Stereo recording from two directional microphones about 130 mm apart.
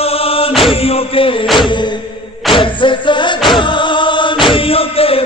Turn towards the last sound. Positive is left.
turn(degrees=45)  # may be behind; listen again after turning